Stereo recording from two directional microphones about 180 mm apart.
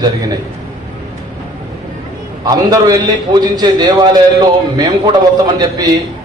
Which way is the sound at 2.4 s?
20° right (ahead or behind).